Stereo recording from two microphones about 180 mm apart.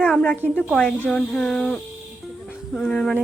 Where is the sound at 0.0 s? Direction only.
5° left (ahead or behind).